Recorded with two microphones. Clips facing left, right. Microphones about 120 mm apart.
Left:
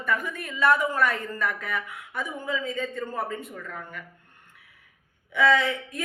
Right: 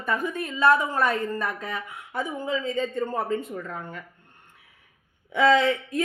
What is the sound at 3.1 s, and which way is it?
Speech, 35° right (ahead or behind).